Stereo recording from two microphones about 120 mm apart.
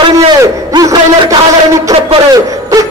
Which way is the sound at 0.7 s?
35° right (ahead or behind).